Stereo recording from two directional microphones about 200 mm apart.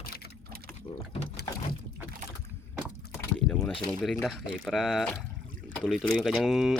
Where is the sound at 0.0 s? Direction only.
50° left (ahead or behind).